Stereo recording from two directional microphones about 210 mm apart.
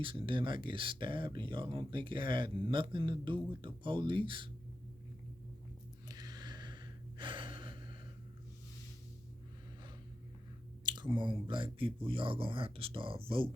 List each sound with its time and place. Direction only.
0.0 s speech: 25° right (ahead or behind)
6.1 s gasp: 20° right (ahead or behind)
10.8 s speech: 20° right (ahead or behind)